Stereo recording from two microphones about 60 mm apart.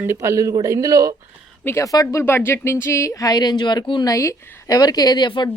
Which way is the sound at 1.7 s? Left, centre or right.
Left.